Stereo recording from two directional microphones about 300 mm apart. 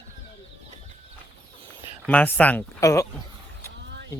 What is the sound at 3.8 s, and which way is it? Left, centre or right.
Vehicle, right.